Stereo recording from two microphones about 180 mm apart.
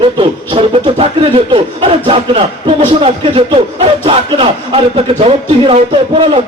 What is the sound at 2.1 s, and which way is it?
Speech, 30° right (ahead or behind).